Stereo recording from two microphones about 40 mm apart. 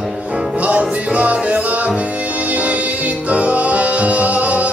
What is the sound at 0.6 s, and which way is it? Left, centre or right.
Music, right.